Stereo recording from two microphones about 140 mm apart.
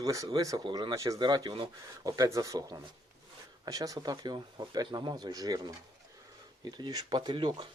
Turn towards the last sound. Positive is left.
turn(degrees=-30)  # may be behind; listen again after turning